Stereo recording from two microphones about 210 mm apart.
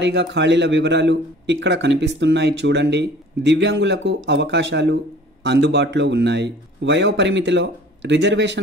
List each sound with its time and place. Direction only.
0.0 s a man's voice: 55° right (ahead or behind)